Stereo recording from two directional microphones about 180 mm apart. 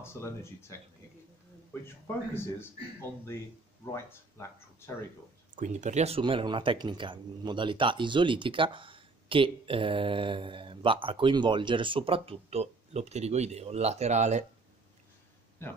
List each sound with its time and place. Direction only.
0.0 s speech: 15° left (ahead or behind)
5.6 s speech: 40° right (ahead or behind)